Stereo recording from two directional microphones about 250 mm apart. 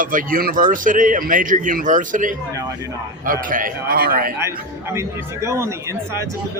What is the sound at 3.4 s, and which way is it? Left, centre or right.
Speech, right.